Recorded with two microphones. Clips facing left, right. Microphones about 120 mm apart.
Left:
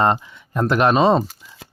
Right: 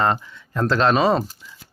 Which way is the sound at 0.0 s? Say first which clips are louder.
Left 3 dB; 20° left (ahead or behind).